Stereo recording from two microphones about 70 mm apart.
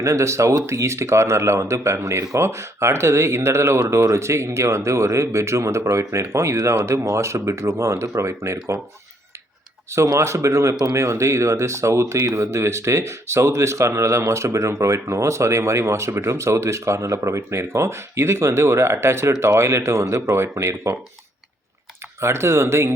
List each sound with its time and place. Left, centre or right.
0.0 s speech: right
10.1 s speech: right
22.2 s speech: right